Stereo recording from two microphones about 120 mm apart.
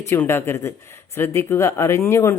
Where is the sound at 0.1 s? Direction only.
20° left (ahead or behind).